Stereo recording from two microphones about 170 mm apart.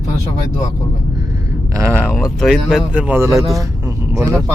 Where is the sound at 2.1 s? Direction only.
Centre (ahead or behind).